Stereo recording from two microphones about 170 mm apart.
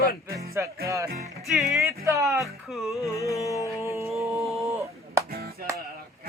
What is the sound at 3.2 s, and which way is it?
Music, 20° left (ahead or behind).